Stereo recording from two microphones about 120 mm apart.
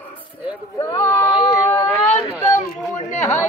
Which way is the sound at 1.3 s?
35° left (ahead or behind).